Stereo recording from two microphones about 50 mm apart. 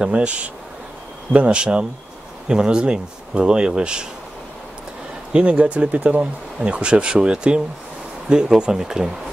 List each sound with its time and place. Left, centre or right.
0.0 s speech: right
5.3 s speech: right